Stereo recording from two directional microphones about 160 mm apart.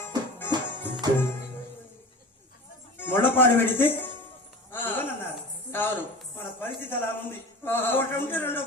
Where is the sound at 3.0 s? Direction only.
15° left (ahead or behind).